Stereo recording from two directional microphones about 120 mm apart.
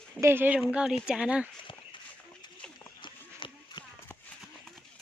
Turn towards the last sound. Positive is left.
turn(degrees=45)  # may be behind; listen again after turning